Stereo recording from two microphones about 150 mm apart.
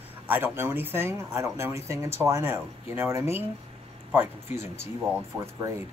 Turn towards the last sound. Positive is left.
turn(degrees=-20)  # may be behind; listen again after turning